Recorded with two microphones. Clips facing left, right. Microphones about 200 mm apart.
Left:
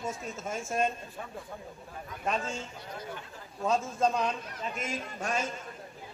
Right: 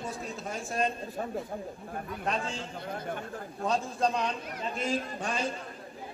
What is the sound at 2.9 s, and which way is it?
Speech, 55° right (ahead or behind).